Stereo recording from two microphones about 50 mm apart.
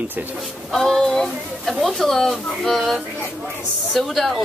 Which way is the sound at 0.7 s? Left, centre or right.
Centre.